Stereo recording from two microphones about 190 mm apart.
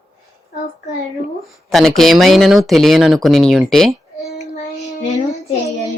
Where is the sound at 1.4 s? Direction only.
Centre (ahead or behind).